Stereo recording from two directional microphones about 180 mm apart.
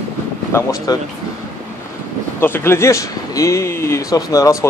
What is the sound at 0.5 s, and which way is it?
Speech, 15° left (ahead or behind).